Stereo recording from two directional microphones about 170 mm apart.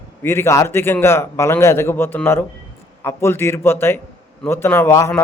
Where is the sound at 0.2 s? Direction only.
15° left (ahead or behind).